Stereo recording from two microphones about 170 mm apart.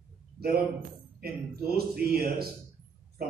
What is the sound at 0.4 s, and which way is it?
A man's voice, 65° right (ahead or behind).